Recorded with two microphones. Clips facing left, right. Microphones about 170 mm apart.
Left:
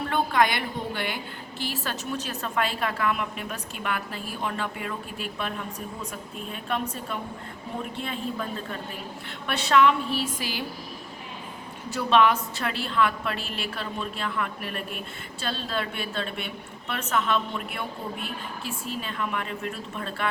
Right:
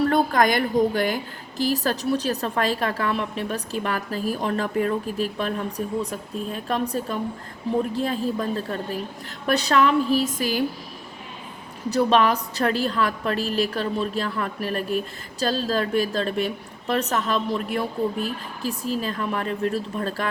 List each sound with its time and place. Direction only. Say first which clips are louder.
0.0 s a woman's voice: right 4 dB; 40° right (ahead or behind)
11.9 s a woman's voice: right 2 dB; 40° right (ahead or behind)